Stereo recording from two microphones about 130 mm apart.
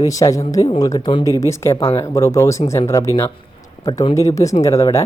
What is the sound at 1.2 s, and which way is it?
Speech, 25° left (ahead or behind).